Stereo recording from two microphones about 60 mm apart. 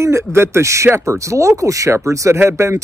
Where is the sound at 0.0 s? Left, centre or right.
Right.